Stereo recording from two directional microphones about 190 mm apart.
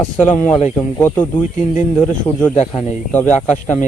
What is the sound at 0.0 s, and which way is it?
Speech, 10° left (ahead or behind).